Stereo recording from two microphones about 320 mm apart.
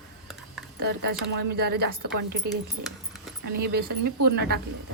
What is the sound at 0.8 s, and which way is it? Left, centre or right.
Speech, right.